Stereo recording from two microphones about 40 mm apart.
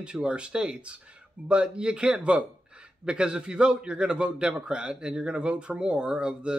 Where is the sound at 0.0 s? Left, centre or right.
Right.